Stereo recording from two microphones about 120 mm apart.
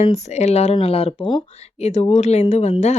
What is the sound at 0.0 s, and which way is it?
Speech, 70° left (ahead or behind).